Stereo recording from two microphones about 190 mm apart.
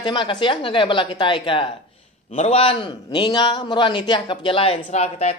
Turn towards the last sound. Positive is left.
turn(degrees=35)  # may be behind; listen again after turning